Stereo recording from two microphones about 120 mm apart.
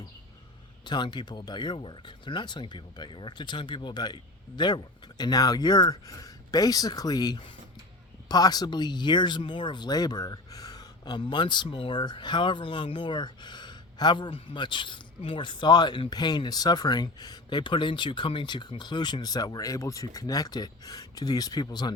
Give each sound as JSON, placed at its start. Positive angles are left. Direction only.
{"t": 0.9, "sound": "speech", "side_deg": 40}